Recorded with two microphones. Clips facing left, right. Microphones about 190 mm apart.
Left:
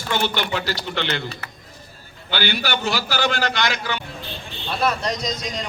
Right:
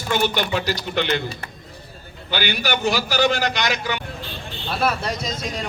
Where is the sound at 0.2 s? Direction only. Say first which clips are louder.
Right 2 dB; 15° right (ahead or behind).